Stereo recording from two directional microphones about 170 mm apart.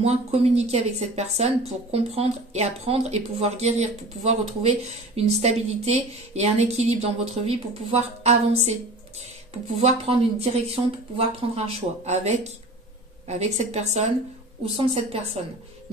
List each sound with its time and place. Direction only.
0.0 s speech: 35° right (ahead or behind)